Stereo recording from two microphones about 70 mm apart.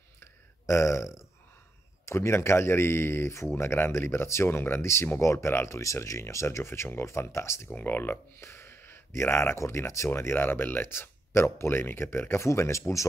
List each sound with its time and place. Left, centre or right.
0.2 s a sound: left
2.0 s speech: left
7.7 s speech: left